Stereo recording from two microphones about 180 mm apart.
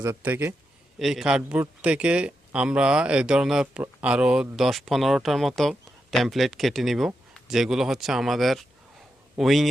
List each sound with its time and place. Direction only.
0.0 s a man's voice: 10° right (ahead or behind)